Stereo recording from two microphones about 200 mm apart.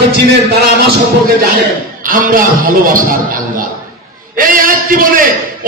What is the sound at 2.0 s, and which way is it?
A man's voice, 45° right (ahead or behind).